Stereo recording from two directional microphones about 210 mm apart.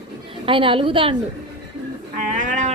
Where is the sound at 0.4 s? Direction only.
25° right (ahead or behind).